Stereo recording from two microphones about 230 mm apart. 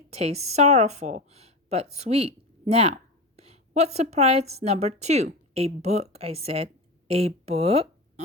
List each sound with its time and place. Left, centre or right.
0.1 s a woman's voice: right